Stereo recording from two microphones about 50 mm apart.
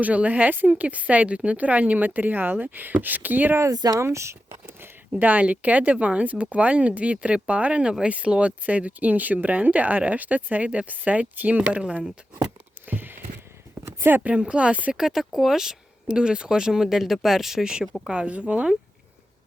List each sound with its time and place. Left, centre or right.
0.0 s a woman's voice: right
3.6 s speech: right
5.2 s speech: right
7.8 s speech: centre
12.9 s a sound: right
14.3 s speech: right
14.9 s speech: centre
18.1 s speech: right